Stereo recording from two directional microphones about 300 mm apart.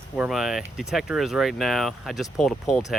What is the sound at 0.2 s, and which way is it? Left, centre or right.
Speech, centre.